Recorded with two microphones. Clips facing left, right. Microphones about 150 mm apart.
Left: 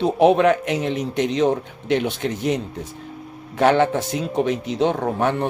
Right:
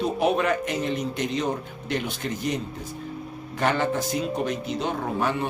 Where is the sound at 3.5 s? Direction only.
70° left (ahead or behind).